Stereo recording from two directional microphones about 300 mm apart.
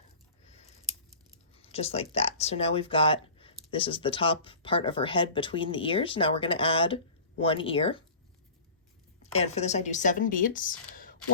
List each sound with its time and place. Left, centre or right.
1.5 s a sound: centre
2.1 s speech: left
9.2 s speech: left